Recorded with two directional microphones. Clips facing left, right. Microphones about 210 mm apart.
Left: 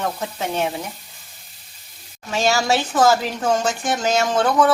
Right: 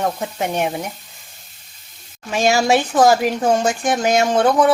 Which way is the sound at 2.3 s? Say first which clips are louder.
Right 4 dB; 15° right (ahead or behind).